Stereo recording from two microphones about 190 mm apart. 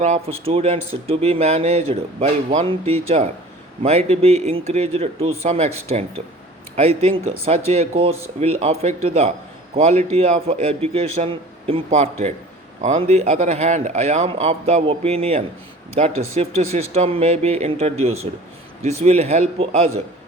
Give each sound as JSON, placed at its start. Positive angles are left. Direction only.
{"t": 0.0, "sound": "a man's voice", "side_deg": -35}